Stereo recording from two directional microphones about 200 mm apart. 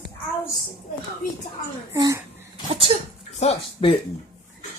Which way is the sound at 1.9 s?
15° right (ahead or behind).